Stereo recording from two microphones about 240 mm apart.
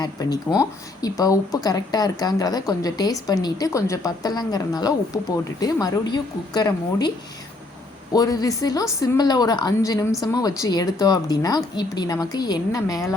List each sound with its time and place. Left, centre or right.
0.0 s a woman's voice: centre
8.1 s a woman's voice: centre